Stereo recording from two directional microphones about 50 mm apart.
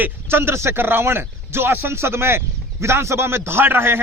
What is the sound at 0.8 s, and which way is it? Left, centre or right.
A man's voice, right.